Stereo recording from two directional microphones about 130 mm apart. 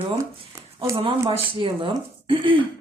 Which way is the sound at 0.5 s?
25° right (ahead or behind).